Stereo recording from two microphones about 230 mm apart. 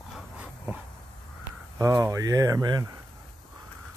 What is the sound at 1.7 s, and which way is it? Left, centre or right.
Speech, centre.